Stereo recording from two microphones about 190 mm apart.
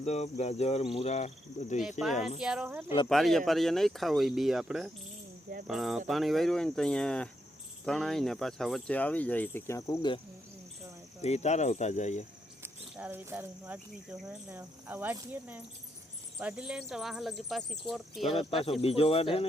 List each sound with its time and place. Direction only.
0.0 s speech: 35° left (ahead or behind)
1.8 s speech: centre (ahead or behind); by 10.2 s 20° left (ahead or behind)
11.2 s speech: 35° left (ahead or behind)
12.6 s speech: 10° right (ahead or behind)
18.2 s speech: 25° left (ahead or behind)